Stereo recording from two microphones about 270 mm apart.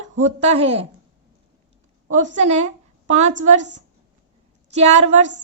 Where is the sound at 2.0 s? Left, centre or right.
Right.